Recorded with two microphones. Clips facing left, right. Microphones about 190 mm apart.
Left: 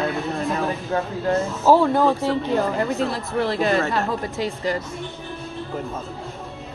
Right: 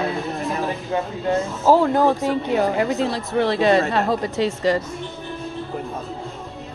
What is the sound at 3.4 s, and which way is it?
A woman's voice, 70° right (ahead or behind).